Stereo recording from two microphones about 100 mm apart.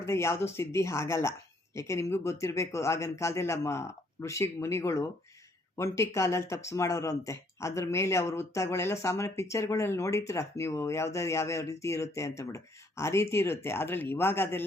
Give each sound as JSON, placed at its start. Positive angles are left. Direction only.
{"t": 0.0, "sound": "speech", "side_deg": 25}